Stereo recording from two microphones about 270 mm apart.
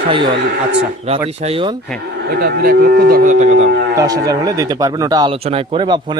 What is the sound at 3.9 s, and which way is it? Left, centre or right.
Speech, centre.